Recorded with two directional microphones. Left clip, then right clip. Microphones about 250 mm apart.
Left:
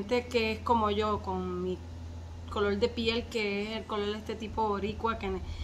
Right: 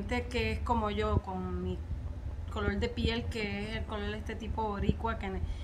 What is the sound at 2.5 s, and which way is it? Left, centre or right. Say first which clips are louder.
A woman's voice: left 6 dB; centre.